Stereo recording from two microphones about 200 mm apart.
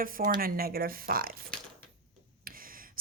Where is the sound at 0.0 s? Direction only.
45° right (ahead or behind).